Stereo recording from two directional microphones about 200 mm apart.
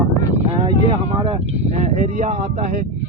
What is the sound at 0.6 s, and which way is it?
Speech, 25° right (ahead or behind).